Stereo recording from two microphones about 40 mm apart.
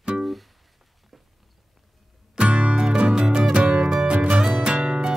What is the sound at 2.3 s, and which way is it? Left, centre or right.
Music, right.